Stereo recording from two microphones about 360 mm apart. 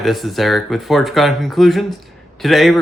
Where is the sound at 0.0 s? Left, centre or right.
Centre.